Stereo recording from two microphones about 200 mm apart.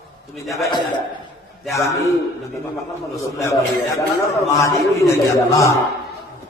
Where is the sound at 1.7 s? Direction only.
15° left (ahead or behind).